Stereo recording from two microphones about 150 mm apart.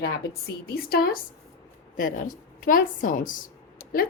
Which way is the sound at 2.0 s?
65° left (ahead or behind).